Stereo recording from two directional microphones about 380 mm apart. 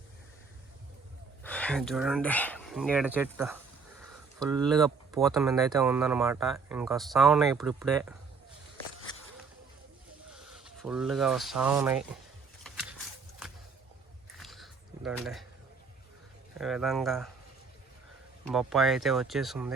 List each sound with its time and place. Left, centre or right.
1.5 s speech: centre
10.5 s speech: centre
12.6 s a sound: centre
14.3 s a sound: centre
16.6 s speech: centre
18.5 s speech: centre